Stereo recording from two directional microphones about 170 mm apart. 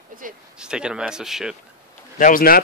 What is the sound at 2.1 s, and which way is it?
Speech, 55° left (ahead or behind).